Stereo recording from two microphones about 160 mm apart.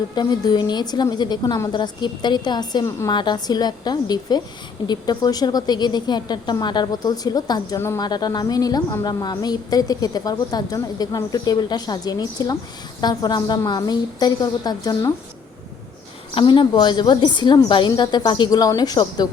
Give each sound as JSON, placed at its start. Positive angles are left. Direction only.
{"t": 0.2, "sound": "a woman's voice", "side_deg": 25}
{"t": 16.3, "sound": "a woman's voice", "side_deg": 30}